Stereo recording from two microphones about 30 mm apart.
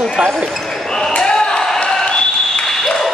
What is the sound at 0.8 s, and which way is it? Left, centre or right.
Speech, centre.